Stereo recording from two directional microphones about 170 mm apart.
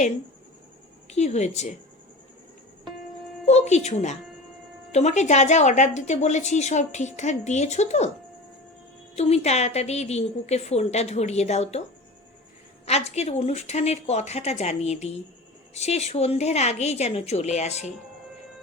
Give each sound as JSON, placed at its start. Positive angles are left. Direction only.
{"t": 1.1, "sound": "a woman's voice", "side_deg": 40}
{"t": 3.4, "sound": "a woman's voice", "side_deg": 40}
{"t": 9.1, "sound": "a woman's voice", "side_deg": 40}
{"t": 12.8, "sound": "a woman's voice", "side_deg": 40}